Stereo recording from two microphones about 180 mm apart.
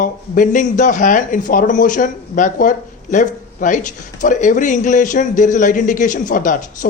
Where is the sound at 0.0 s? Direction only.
45° left (ahead or behind).